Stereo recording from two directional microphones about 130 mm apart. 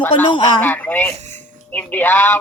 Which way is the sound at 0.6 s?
15° left (ahead or behind).